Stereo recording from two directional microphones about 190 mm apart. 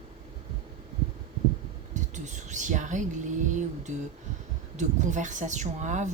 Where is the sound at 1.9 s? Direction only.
40° right (ahead or behind).